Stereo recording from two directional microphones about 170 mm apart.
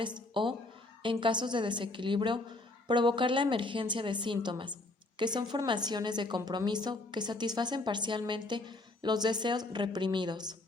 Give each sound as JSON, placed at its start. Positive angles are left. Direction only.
{"t": 0.0, "sound": "a woman's voice", "side_deg": -30}